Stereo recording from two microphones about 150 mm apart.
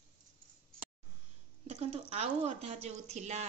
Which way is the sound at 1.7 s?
45° right (ahead or behind).